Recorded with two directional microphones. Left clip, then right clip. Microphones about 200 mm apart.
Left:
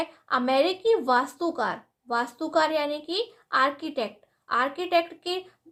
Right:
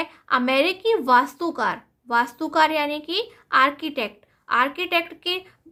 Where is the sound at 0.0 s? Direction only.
30° right (ahead or behind).